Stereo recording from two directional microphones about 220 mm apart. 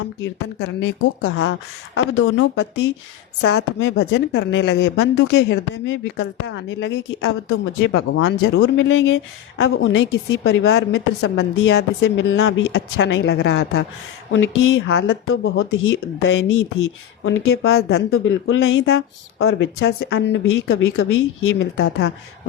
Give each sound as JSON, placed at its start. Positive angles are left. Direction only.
{"t": 0.2, "sound": "speech", "side_deg": 55}
{"t": 2.1, "sound": "speech", "side_deg": 70}
{"t": 3.4, "sound": "a woman's voice", "side_deg": 50}
{"t": 7.8, "sound": "speech", "side_deg": 65}
{"t": 11.8, "sound": "speech", "side_deg": 60}
{"t": 15.3, "sound": "speech", "side_deg": 70}
{"t": 17.7, "sound": "a woman's voice", "side_deg": 45}
{"t": 18.1, "sound": "speech", "side_deg": 65}